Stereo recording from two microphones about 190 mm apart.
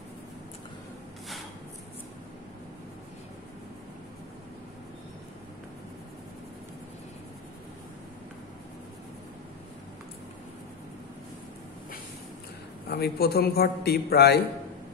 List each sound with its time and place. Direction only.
12.8 s a man's voice: 55° left (ahead or behind)